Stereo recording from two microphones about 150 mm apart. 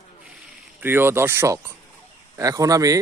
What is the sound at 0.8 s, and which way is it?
Speech, 15° right (ahead or behind).